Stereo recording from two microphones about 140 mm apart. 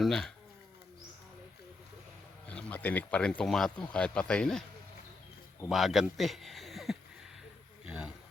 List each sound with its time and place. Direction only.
0.0 s speech: 5° left (ahead or behind)
2.5 s speech: 10° left (ahead or behind)
5.6 s speech: centre (ahead or behind)
7.9 s a sound: 5° right (ahead or behind)